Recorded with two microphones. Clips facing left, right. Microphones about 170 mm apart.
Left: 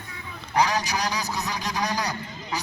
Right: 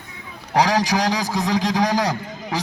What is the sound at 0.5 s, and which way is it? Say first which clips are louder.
A man's voice: right 5 dB; 90° right.